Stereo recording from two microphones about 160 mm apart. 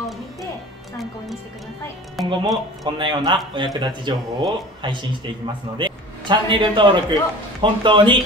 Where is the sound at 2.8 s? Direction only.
30° right (ahead or behind).